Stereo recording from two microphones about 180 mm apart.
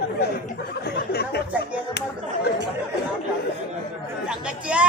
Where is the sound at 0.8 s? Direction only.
60° left (ahead or behind).